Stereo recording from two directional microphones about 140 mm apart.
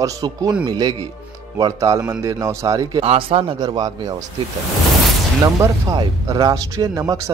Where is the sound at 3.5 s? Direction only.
25° right (ahead or behind).